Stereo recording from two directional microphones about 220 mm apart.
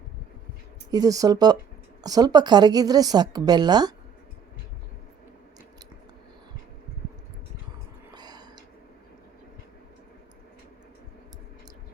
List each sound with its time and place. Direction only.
0.9 s speech: 15° right (ahead or behind)
8.1 s whispering: 20° right (ahead or behind)